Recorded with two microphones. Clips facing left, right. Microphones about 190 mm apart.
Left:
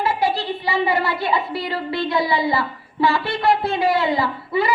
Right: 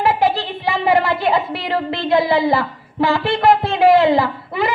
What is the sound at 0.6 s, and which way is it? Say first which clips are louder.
A woman's voice: right 5 dB; 55° right (ahead or behind).